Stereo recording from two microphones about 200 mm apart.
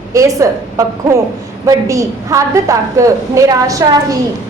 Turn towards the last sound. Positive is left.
turn(degrees=-15)  # may be behind; listen again after turning